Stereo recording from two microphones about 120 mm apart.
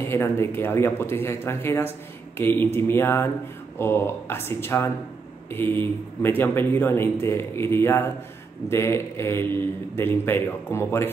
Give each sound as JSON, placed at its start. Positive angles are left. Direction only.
{"t": 0.1, "sound": "speech", "side_deg": 20}